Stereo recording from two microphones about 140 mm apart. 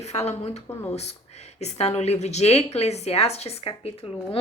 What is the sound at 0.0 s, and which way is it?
A woman's voice, 50° left (ahead or behind).